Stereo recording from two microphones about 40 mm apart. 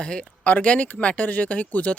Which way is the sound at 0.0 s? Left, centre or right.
Left.